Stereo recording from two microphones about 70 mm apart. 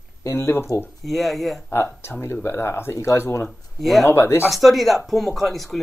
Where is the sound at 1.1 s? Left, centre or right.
Centre.